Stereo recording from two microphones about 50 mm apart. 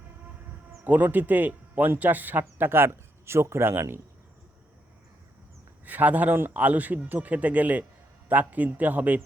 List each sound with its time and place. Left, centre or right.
0.9 s speech: right
5.8 s speech: right